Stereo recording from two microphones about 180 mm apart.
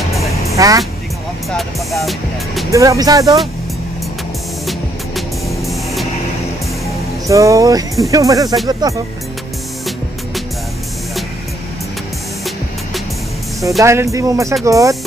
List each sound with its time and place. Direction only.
0.1 s music: centre (ahead or behind)
0.6 s speech: 20° right (ahead or behind)
1.5 s music: centre (ahead or behind)
2.7 s speech: 15° right (ahead or behind)
4.6 s music: centre (ahead or behind)
7.2 s speech: 20° right (ahead or behind)
13.6 s speech: 15° right (ahead or behind)